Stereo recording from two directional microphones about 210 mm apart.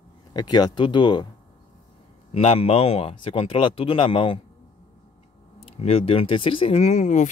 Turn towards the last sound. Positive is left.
turn(degrees=35)  # may be behind; listen again after turning